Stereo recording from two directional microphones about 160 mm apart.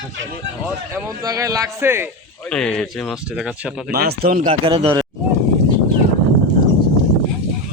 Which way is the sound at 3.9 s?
70° right (ahead or behind).